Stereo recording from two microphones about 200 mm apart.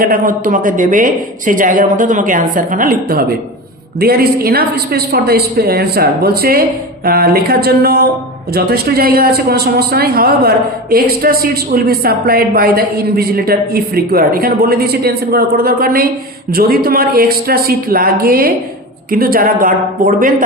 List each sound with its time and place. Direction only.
0.0 s speech: 45° right (ahead or behind)